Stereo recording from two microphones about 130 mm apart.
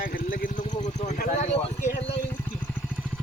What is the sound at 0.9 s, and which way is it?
Speech, 75° left (ahead or behind).